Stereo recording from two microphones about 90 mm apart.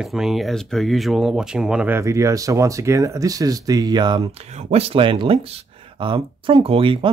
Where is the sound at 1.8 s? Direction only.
30° right (ahead or behind).